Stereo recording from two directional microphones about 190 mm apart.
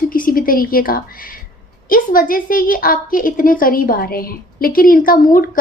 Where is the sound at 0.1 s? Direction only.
50° left (ahead or behind).